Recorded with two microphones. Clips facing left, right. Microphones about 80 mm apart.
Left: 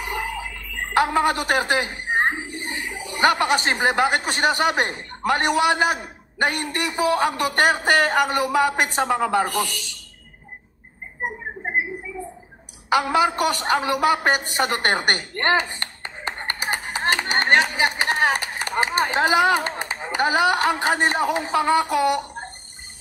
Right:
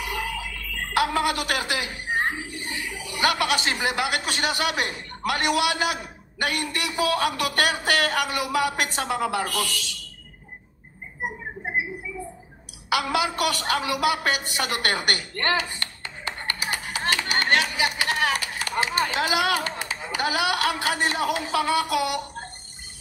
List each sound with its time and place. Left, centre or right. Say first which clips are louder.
0.0 s a man's voice: left 2 dB; left
9.4 s a man's voice: left 5 dB; left
11.1 s a sound: left 3 dB; left
13.0 s a woman's voice: left 4 dB; left